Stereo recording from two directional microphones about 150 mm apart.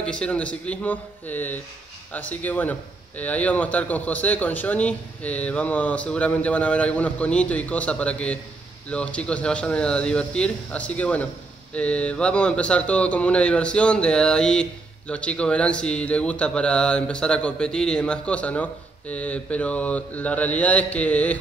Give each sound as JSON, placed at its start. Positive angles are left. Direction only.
{"t": 0.0, "sound": "speech", "side_deg": 5}